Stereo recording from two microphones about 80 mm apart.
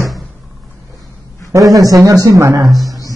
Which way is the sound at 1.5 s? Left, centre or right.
Right.